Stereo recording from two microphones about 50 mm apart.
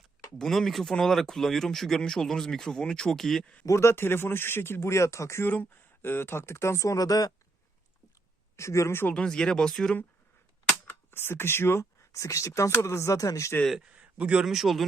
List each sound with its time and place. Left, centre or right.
0.3 s speech: centre
3.7 s speech: left
6.0 s speech: left
8.5 s speech: left
9.1 s speech: centre
11.1 s speech: left
13.9 s a sound: right
14.4 s speech: centre